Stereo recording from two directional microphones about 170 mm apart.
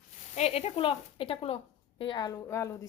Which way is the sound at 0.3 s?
40° left (ahead or behind).